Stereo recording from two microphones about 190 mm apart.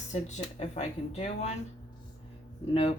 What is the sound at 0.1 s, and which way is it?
Speech, 35° left (ahead or behind).